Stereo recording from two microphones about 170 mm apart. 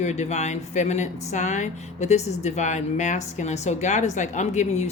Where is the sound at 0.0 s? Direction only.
40° left (ahead or behind).